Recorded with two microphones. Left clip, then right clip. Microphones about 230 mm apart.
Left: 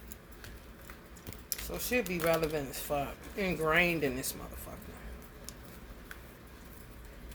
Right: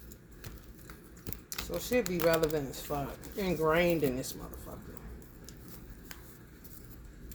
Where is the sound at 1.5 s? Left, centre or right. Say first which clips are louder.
Right 2 dB; centre.